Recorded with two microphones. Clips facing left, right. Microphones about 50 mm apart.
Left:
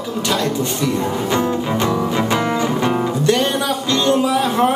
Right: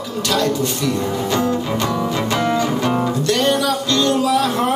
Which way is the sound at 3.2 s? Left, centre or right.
Left.